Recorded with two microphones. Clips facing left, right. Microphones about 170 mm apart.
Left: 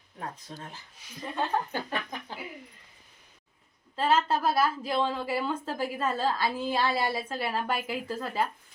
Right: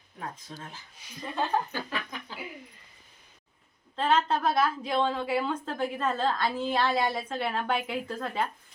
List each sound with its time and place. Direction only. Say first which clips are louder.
0.5 s speech: even; 15° left (ahead or behind)
1.0 s a woman's voice: even; 5° left (ahead or behind)
1.9 s a sound: left 2 dB; 45° left (ahead or behind)
3.9 s a woman's voice: even; 5° left (ahead or behind)